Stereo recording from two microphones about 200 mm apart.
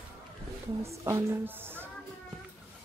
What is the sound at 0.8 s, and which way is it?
Speech, 15° right (ahead or behind).